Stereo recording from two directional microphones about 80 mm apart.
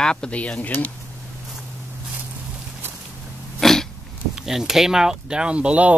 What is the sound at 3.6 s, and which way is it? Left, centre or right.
Throat clearing, centre.